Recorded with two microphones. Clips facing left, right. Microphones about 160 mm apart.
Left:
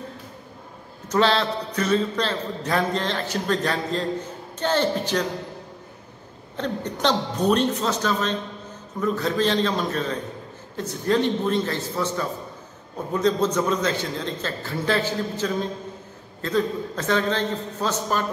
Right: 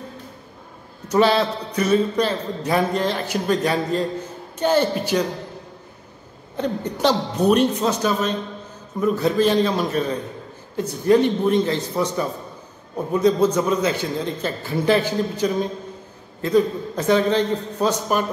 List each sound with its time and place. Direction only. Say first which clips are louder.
1.0 s a man's voice: right 3 dB; 10° right (ahead or behind)
6.5 s a man's voice: right 3 dB; 10° right (ahead or behind)